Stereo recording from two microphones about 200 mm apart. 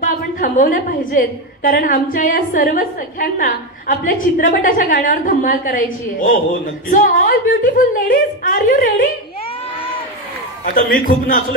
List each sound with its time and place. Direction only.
0.0 s a woman's voice: 40° left (ahead or behind)
6.9 s a woman's voice: 45° left (ahead or behind)
10.6 s a man's voice: 45° left (ahead or behind)